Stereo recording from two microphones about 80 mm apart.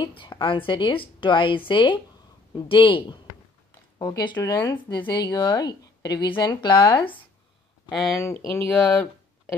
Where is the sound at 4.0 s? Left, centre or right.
Left.